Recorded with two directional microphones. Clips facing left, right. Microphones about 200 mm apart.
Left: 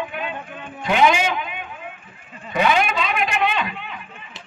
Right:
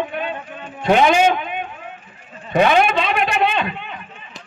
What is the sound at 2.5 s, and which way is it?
A man's voice, 45° right (ahead or behind).